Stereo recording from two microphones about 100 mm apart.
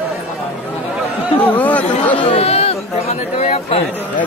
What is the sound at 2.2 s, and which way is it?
Chatter, 85° left.